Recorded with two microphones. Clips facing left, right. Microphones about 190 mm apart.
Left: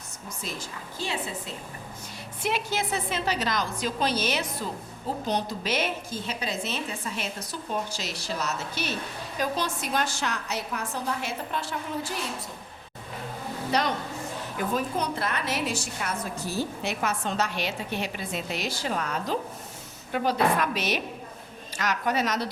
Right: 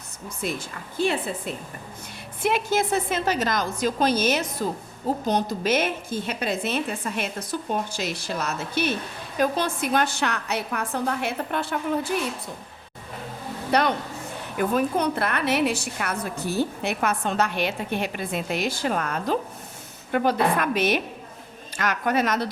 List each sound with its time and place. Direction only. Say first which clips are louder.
0.9 s a woman's voice: right 8 dB; 55° right (ahead or behind)
13.7 s a woman's voice: right 5 dB; 60° right (ahead or behind)